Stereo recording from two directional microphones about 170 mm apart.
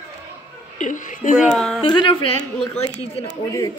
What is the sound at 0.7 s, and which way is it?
Speech, 45° left (ahead or behind).